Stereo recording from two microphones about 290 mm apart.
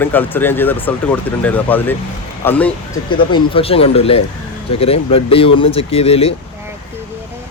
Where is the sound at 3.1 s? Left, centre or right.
Centre.